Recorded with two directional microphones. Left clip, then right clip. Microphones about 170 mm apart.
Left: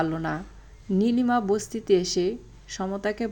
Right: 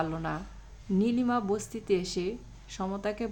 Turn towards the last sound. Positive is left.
turn(degrees=25)  # may be behind; listen again after turning